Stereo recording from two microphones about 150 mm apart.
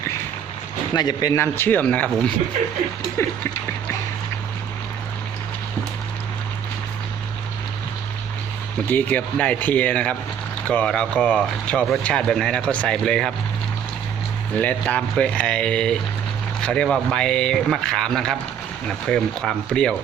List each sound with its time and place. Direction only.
0.9 s speech: 25° left (ahead or behind)
8.9 s speech: 10° left (ahead or behind)
14.6 s a man's voice: 10° left (ahead or behind)